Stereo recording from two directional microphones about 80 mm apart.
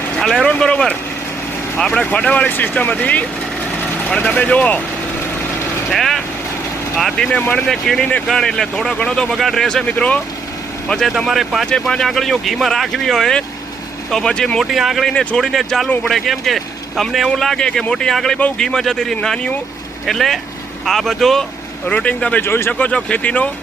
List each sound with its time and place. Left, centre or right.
0.2 s speech: centre
5.9 s speech: centre
14.6 s speech: centre
15.1 s speech: centre
15.4 s speech: centre
21.8 s speech: centre
22.4 s speech: left
22.9 s speech: centre